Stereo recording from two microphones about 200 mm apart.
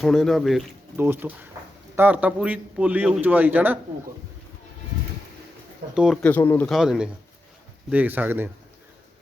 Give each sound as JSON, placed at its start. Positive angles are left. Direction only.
{"t": 0.0, "sound": "a man's voice", "side_deg": 0}
{"t": 5.9, "sound": "speech", "side_deg": -5}
{"t": 6.2, "sound": "speech", "side_deg": 10}
{"t": 6.7, "sound": "a man's voice", "side_deg": 0}